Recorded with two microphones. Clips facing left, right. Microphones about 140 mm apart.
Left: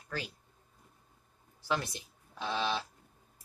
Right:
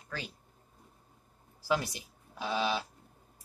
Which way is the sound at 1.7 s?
5° right (ahead or behind).